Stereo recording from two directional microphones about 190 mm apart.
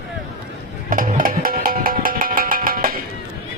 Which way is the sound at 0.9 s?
45° right (ahead or behind).